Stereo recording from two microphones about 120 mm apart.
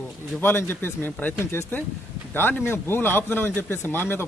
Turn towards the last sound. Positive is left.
turn(degrees=20)  # may be behind; listen again after turning